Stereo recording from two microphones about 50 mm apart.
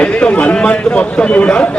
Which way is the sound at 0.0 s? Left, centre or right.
Left.